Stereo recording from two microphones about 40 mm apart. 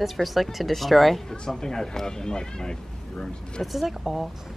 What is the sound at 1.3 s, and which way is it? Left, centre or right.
Speech, centre.